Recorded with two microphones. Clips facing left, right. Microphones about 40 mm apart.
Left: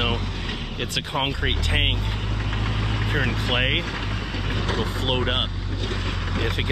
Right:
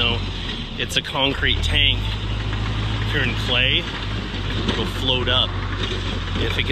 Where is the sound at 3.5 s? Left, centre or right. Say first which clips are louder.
Right 4 dB; right.